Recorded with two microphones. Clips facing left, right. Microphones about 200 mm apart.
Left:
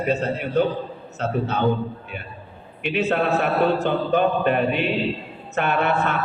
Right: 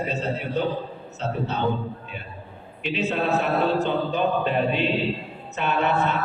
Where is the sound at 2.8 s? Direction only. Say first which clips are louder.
Left 3 dB; 55° left (ahead or behind).